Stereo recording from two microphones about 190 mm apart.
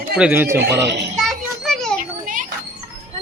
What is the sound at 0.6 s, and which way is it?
Speech, 65° right (ahead or behind).